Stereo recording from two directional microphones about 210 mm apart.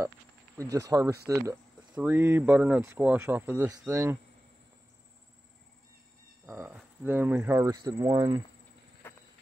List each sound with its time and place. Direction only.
0.6 s speech: 15° right (ahead or behind)
6.4 s speech: 10° right (ahead or behind)
9.0 s clip-clop: 10° left (ahead or behind)